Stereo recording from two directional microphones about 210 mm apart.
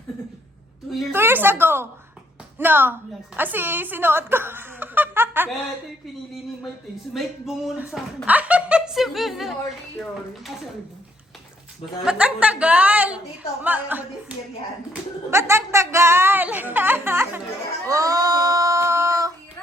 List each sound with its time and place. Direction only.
1.1 s a woman's voice: 10° right (ahead or behind)
7.1 s speech: centre (ahead or behind)
12.0 s a woman's voice: 5° right (ahead or behind)
17.8 s a sound: 15° right (ahead or behind)